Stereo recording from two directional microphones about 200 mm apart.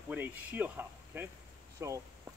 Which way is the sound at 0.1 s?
10° right (ahead or behind).